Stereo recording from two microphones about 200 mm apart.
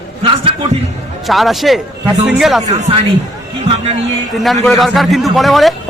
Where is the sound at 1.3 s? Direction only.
Centre (ahead or behind).